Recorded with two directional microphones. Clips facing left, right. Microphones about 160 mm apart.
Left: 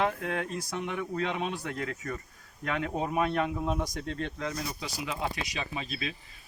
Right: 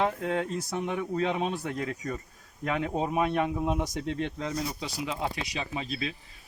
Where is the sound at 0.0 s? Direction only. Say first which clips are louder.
Right 2 dB; 25° right (ahead or behind).